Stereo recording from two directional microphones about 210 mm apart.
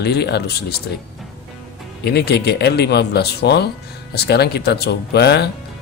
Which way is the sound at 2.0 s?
50° left (ahead or behind).